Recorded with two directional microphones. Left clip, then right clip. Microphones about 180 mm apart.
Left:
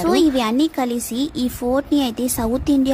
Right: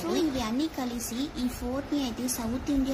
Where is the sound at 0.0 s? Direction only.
60° left (ahead or behind).